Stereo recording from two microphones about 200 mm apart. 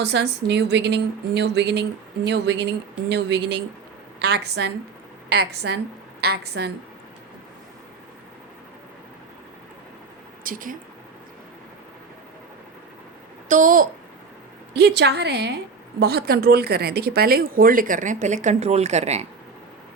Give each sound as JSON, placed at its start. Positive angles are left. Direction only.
{"t": 0.0, "sound": "a woman's voice", "side_deg": -60}
{"t": 10.4, "sound": "speech", "side_deg": -45}
{"t": 13.5, "sound": "a woman's voice", "side_deg": -40}
{"t": 14.7, "sound": "speech", "side_deg": -55}